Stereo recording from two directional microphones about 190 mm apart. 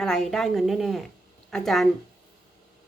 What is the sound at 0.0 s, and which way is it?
A woman's voice, centre (ahead or behind).